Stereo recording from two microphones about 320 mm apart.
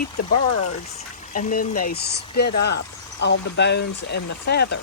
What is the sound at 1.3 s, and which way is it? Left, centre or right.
Speech, left.